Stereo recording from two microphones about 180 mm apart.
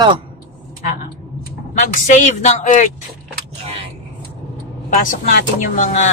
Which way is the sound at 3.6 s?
30° right (ahead or behind).